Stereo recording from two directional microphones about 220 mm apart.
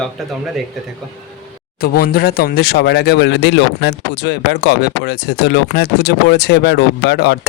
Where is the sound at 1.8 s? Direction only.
45° left (ahead or behind).